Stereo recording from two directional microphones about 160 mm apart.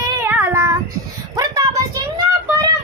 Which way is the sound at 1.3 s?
25° right (ahead or behind).